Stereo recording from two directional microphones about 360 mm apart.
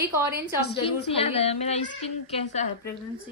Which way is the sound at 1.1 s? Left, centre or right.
Centre.